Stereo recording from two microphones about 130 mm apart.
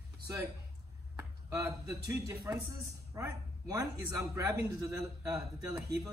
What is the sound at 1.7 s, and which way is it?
Speech, 30° right (ahead or behind).